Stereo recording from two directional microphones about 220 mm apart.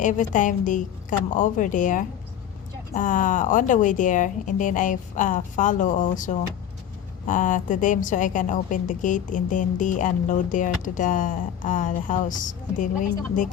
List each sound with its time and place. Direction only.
0.0 s a woman's voice: 35° left (ahead or behind)